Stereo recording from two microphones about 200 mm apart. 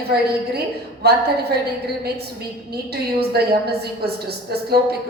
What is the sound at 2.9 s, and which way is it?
A woman's voice, 50° right (ahead or behind).